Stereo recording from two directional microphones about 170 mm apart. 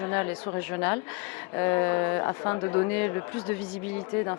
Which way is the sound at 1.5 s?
20° left (ahead or behind).